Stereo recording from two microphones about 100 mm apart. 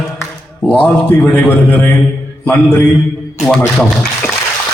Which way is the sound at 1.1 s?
15° left (ahead or behind).